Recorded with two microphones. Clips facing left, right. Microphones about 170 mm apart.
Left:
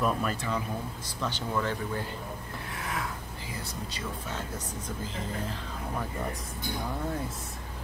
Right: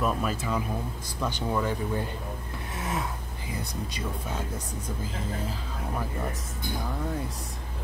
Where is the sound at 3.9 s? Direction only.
10° right (ahead or behind).